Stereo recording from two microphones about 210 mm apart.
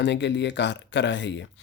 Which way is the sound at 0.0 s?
55° left (ahead or behind).